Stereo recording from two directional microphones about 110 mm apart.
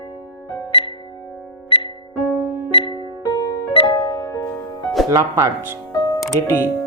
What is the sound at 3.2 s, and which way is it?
Music, 35° left (ahead or behind).